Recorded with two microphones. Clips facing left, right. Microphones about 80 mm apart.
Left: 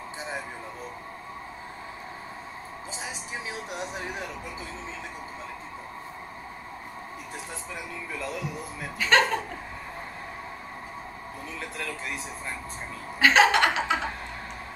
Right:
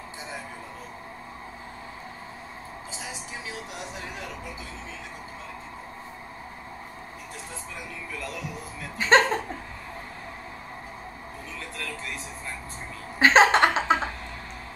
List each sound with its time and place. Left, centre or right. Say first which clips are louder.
8.9 s speech: right 3 dB; right
13.2 s speech: right 2 dB; right